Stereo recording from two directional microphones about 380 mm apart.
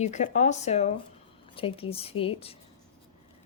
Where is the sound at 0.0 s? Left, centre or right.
Centre.